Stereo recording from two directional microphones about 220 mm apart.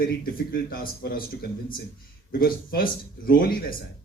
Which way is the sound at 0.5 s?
40° left (ahead or behind).